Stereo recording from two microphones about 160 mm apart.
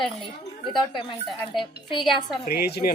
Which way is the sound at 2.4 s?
80° left.